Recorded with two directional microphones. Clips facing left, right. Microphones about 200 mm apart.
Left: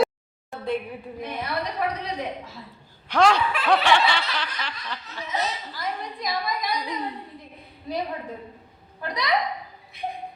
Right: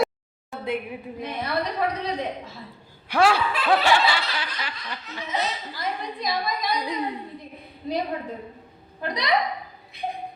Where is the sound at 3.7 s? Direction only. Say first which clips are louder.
Even; 5° right (ahead or behind).